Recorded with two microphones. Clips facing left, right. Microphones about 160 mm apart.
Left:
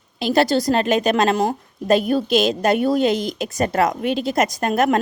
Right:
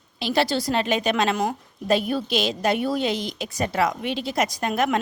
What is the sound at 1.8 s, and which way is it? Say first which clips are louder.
A woman's voice: left 5 dB; 45° left (ahead or behind).